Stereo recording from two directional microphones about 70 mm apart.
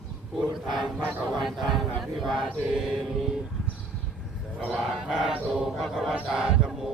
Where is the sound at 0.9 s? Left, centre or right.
Right.